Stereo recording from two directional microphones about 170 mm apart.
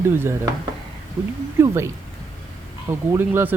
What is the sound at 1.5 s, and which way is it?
Speech, 15° right (ahead or behind).